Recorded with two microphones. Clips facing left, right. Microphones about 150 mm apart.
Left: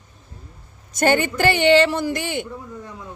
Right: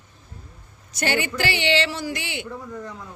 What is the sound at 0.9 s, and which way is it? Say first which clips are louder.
A woman's voice: left 6 dB; 45° left (ahead or behind).